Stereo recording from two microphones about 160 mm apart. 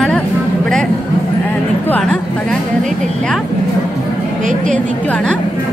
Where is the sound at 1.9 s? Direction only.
5° left (ahead or behind).